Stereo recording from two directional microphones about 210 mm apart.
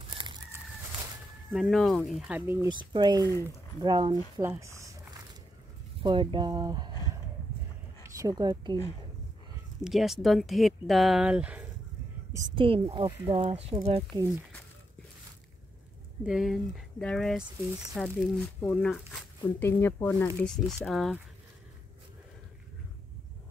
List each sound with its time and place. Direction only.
0.2 s chicken: 25° right (ahead or behind)
1.5 s speech: centre (ahead or behind)
2.7 s speech: 20° right (ahead or behind)
4.4 s a sound: 15° right (ahead or behind)
6.0 s speech: 25° right (ahead or behind)
8.0 s speech: 15° right (ahead or behind)
9.8 s speech: centre (ahead or behind)
12.3 s speech: 15° right (ahead or behind)
16.3 s speech: centre (ahead or behind)